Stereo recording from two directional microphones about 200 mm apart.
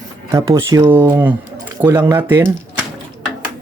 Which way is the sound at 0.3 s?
15° right (ahead or behind).